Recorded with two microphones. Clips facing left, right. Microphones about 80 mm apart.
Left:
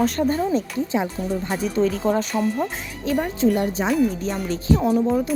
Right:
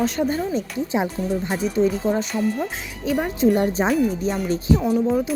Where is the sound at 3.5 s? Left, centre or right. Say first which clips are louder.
Right 2 dB; right.